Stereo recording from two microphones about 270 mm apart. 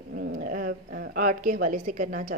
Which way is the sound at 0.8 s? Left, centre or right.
Right.